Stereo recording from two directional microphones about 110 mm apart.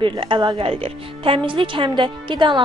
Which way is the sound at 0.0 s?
50° right (ahead or behind).